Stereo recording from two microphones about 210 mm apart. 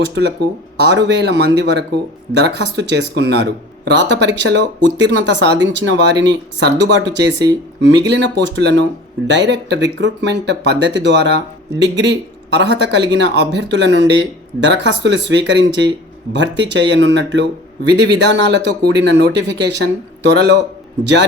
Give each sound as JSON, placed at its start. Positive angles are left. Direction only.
{"t": 0.1, "sound": "speech", "side_deg": -55}